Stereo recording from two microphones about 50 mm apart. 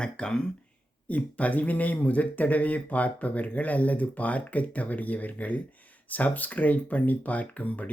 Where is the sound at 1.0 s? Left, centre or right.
Left.